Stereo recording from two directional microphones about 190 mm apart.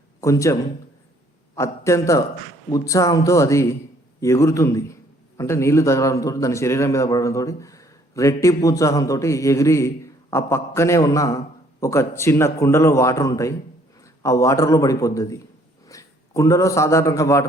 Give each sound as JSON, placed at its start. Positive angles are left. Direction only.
{"t": 0.2, "sound": "a man's voice", "side_deg": 15}